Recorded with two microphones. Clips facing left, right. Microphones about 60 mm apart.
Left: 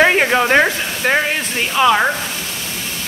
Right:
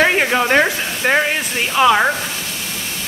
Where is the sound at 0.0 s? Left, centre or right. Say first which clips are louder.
Left 2 dB; centre.